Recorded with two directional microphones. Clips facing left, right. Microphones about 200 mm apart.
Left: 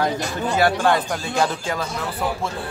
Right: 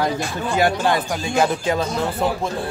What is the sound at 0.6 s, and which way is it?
Speech, 15° right (ahead or behind).